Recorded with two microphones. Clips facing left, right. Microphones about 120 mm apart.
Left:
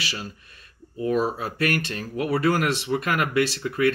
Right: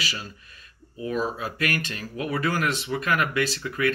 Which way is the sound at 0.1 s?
35° left (ahead or behind).